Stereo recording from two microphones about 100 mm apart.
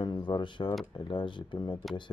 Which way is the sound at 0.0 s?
50° left (ahead or behind).